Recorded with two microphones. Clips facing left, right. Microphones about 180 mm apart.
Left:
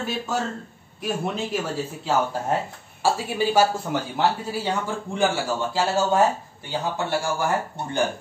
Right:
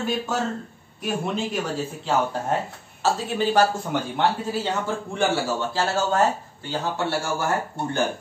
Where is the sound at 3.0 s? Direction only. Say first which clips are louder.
Even; 10° left (ahead or behind).